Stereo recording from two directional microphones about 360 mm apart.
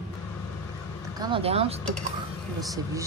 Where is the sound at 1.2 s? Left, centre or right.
Centre.